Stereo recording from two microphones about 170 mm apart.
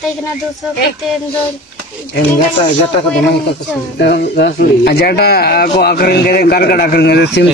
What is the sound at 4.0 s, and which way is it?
Speech, 75° left (ahead or behind).